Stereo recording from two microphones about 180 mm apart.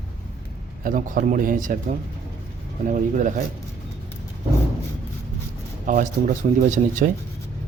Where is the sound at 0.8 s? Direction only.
50° right (ahead or behind).